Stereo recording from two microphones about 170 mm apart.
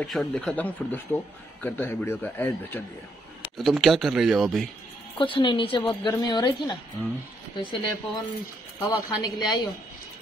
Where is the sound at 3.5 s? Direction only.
Centre (ahead or behind).